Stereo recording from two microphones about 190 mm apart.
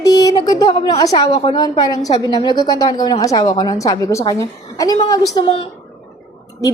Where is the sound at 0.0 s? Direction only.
20° left (ahead or behind).